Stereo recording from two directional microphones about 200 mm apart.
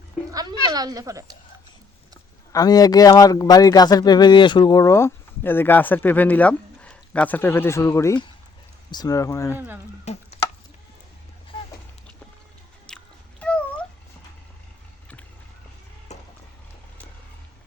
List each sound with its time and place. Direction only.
0.3 s speech: 20° right (ahead or behind)
2.5 s speech: 20° left (ahead or behind)
12.9 s a sound: 5° left (ahead or behind)
13.4 s cat: 5° left (ahead or behind)
16.1 s run: 35° left (ahead or behind)